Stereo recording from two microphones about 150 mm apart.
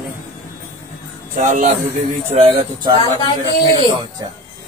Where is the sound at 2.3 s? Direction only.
40° right (ahead or behind).